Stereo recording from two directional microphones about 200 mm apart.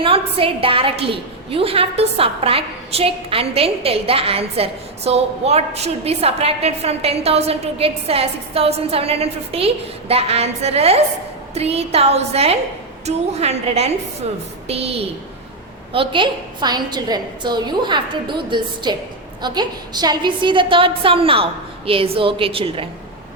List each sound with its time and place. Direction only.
0.0 s a woman's voice: 25° right (ahead or behind)